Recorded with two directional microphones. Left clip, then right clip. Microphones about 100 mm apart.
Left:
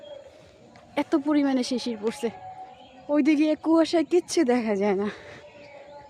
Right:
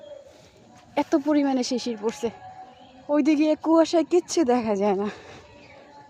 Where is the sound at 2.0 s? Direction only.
10° left (ahead or behind).